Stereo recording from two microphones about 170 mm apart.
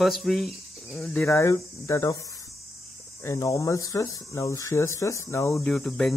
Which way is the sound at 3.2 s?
15° left (ahead or behind).